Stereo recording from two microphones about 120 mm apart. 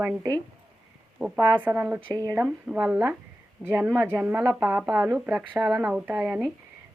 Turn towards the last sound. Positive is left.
turn(degrees=-15)  # may be behind; listen again after turning